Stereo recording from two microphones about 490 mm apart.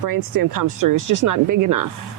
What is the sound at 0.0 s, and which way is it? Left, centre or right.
Speech, right.